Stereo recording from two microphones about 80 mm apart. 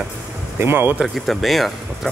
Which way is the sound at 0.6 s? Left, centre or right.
Right.